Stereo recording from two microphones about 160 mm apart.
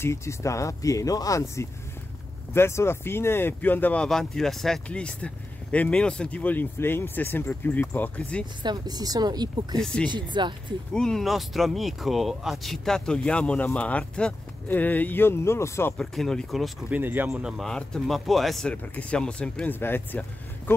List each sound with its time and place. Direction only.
0.0 s speech: 15° left (ahead or behind)
8.6 s speech: 25° right (ahead or behind)
10.9 s speech: 5° left (ahead or behind)
16.0 s speech: 5° left (ahead or behind)
17.0 s speech: 10° right (ahead or behind); by 20.7 s 10° left (ahead or behind)